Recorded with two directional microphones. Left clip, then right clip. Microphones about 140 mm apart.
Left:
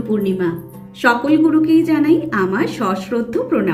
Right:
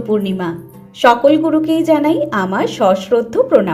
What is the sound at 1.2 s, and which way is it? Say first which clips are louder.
A woman's voice: right 2 dB; 60° right (ahead or behind).